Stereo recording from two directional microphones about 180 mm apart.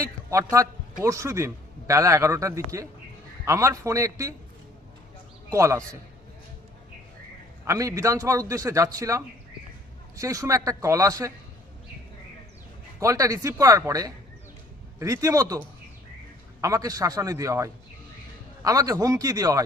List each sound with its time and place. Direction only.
0.0 s a sound: 15° right (ahead or behind)
0.5 s a man's voice: 15° right (ahead or behind)
5.5 s a man's voice: 15° right (ahead or behind)
7.7 s a man's voice: 15° right (ahead or behind)
13.0 s a man's voice: 20° right (ahead or behind)